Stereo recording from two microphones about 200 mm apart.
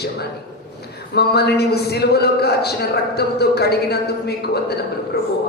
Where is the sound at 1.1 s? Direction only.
55° left (ahead or behind).